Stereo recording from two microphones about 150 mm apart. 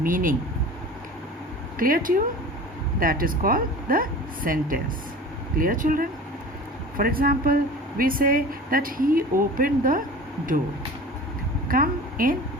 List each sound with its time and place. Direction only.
0.0 s speech: 65° right (ahead or behind)
1.8 s speech: 70° right (ahead or behind)
6.9 s speech: 75° right (ahead or behind)
11.7 s a sound: 70° right (ahead or behind)